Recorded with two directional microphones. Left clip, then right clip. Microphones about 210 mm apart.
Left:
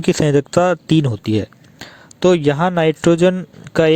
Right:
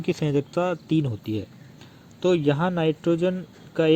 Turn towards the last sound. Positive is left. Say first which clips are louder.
# left 7 dB
turn(degrees=50)  # may be behind; listen again after turning